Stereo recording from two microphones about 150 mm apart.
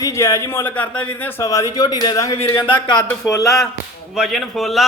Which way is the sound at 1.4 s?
20° left (ahead or behind).